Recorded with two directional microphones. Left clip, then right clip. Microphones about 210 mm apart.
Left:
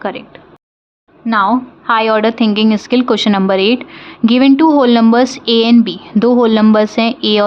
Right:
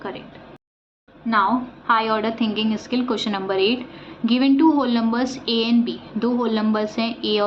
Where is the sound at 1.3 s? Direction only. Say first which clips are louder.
Left 7 dB; 55° left (ahead or behind).